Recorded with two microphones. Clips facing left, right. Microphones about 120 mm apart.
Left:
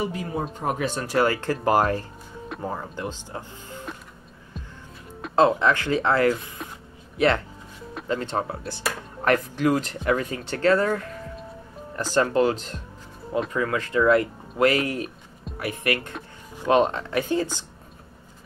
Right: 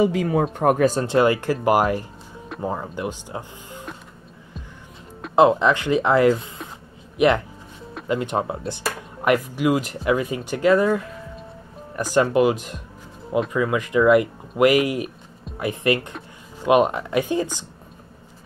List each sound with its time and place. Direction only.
0.0 s speech: 90° right; by 0.8 s 55° right (ahead or behind)
1.0 s speech: 20° right (ahead or behind)
5.3 s speech: 20° right (ahead or behind)